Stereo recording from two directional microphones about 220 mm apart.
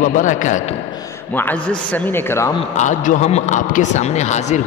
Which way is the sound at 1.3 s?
10° left (ahead or behind).